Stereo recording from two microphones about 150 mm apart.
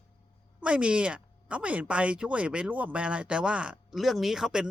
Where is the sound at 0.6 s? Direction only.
5° right (ahead or behind).